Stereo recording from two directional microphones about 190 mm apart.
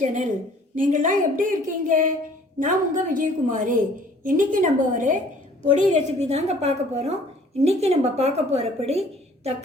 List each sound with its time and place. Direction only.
0.0 s a woman's voice: 40° right (ahead or behind)